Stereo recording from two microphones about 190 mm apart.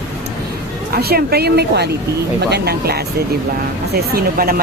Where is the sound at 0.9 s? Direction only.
55° right (ahead or behind).